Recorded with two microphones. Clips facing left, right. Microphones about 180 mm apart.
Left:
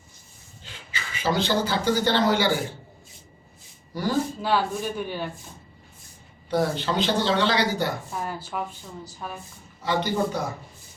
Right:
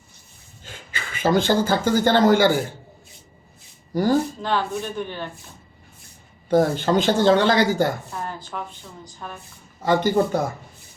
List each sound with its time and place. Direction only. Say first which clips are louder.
0.6 s speech: right 2 dB; 50° right (ahead or behind)
4.4 s speech: even; 10° left (ahead or behind)
6.5 s speech: right 6 dB; 45° right (ahead or behind)
8.1 s speech: even; 10° left (ahead or behind)
9.8 s speech: right 6 dB; 50° right (ahead or behind)